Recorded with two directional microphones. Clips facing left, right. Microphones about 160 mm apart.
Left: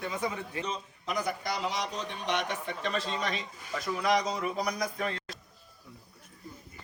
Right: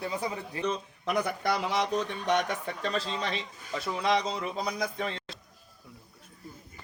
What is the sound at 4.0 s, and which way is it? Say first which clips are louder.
Speech: even; 25° right (ahead or behind).